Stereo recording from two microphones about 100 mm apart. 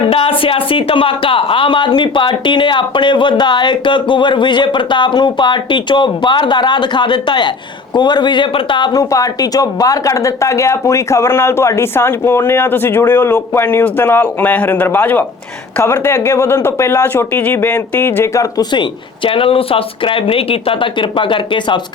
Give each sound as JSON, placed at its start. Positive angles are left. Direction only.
{"t": 0.1, "sound": "speech", "side_deg": 65}
{"t": 18.5, "sound": "speech", "side_deg": 50}